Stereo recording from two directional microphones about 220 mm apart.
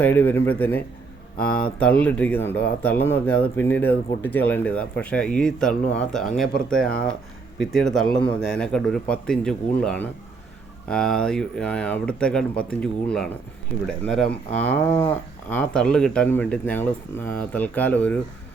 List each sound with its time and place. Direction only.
0.0 s speech: 10° left (ahead or behind)